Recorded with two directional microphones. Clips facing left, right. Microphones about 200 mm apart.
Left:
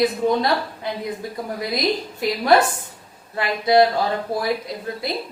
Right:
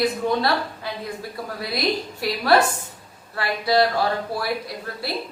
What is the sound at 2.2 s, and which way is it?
A woman's voice, 20° left (ahead or behind).